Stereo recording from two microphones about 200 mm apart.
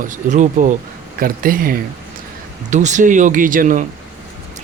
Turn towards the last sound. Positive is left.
turn(degrees=-40)  # may be behind; listen again after turning